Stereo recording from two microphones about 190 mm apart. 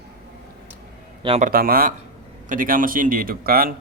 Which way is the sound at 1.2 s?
30° right (ahead or behind).